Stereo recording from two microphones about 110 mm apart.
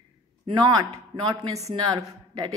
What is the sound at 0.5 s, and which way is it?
Speech, 40° right (ahead or behind).